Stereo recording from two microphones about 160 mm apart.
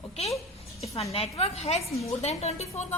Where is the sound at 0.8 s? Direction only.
40° left (ahead or behind).